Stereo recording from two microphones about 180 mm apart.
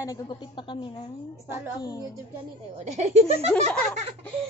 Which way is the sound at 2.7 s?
35° right (ahead or behind).